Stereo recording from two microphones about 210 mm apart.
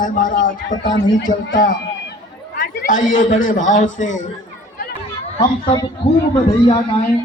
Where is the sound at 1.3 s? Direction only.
40° left (ahead or behind).